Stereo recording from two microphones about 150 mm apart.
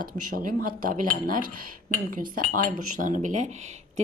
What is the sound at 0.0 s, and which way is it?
Speech, 65° right (ahead or behind).